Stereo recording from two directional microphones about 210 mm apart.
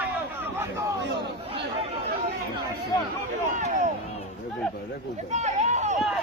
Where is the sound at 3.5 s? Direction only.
35° right (ahead or behind).